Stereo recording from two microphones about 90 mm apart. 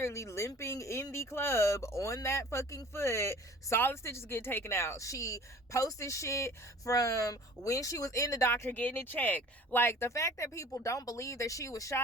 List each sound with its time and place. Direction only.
0.0 s speech: 35° left (ahead or behind)
8.8 s speech: 20° left (ahead or behind); by 12.0 s 35° left (ahead or behind)